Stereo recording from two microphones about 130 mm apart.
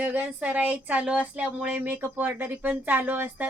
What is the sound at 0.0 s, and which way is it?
A woman's voice, 15° right (ahead or behind).